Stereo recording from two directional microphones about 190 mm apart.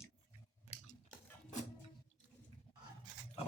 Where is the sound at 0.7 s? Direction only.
35° left (ahead or behind).